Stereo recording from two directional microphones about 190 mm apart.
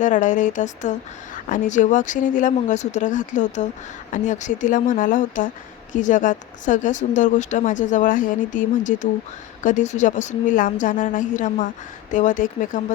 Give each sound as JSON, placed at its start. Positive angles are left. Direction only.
{"t": 0.0, "sound": "a woman's voice", "side_deg": 40}